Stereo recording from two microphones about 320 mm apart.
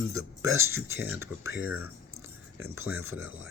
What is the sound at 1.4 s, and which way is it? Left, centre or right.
Speech, right.